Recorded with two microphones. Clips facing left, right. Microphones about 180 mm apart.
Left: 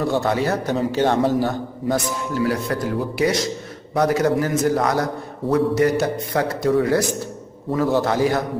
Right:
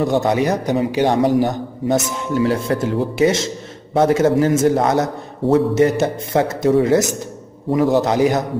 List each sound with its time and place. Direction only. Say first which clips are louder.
0.0 s a man's voice: right 4 dB; 20° right (ahead or behind)